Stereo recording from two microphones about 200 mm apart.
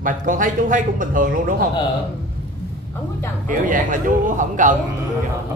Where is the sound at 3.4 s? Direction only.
40° right (ahead or behind).